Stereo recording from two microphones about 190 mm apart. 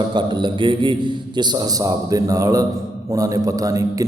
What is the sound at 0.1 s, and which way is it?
A man's voice, 25° right (ahead or behind).